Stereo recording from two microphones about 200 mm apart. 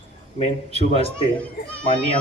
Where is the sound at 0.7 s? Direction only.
30° left (ahead or behind).